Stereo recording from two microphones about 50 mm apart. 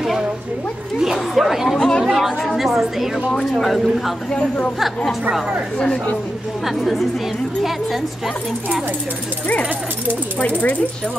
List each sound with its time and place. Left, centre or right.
1.0 s a woman's voice: centre
1.8 s chatter: centre
2.0 s a woman's voice: centre
4.3 s a woman's voice: centre
5.8 s speech: left
6.6 s a woman's voice: centre